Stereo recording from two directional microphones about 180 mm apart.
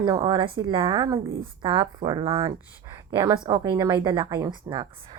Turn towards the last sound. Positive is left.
turn(degrees=-25)  # may be behind; listen again after turning